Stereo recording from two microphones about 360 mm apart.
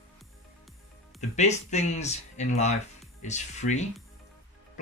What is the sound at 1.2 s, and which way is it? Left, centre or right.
Speech, centre.